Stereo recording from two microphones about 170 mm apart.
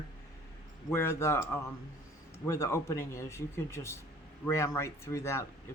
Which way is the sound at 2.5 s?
15° left (ahead or behind).